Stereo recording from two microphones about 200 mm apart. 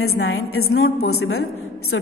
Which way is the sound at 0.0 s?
90° left.